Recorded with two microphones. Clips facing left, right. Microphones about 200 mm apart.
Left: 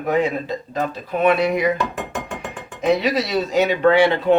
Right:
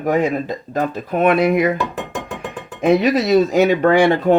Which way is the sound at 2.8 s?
50° right (ahead or behind).